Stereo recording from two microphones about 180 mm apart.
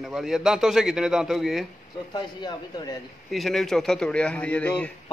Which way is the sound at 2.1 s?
20° left (ahead or behind).